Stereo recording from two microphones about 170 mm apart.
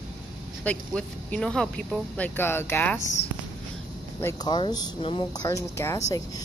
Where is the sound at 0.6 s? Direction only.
5° left (ahead or behind).